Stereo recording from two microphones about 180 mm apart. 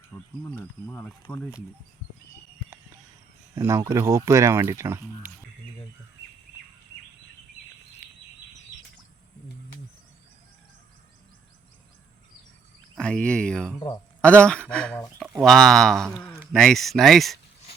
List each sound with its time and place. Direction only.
0.1 s speech: 10° left (ahead or behind)
3.5 s speech: 15° right (ahead or behind)
13.0 s speech: 5° left (ahead or behind)